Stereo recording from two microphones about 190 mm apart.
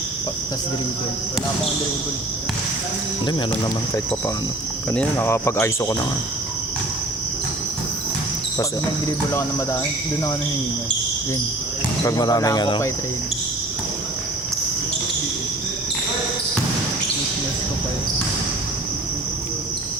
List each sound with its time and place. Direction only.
4.9 s speech: 10° left (ahead or behind)
12.0 s speech: 20° left (ahead or behind)